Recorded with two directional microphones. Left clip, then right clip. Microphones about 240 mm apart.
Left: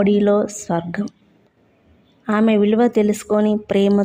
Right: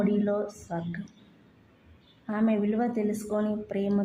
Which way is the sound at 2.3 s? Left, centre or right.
Left.